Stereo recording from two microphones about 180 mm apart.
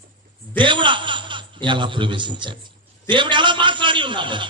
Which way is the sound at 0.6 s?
25° right (ahead or behind).